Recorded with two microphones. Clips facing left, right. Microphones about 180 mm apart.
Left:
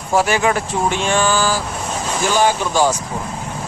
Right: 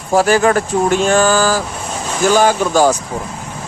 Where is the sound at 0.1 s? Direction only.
40° right (ahead or behind).